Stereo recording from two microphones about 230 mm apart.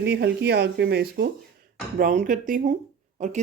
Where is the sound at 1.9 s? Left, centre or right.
Right.